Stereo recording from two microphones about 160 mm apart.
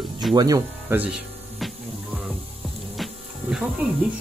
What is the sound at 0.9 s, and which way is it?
Music, 10° right (ahead or behind).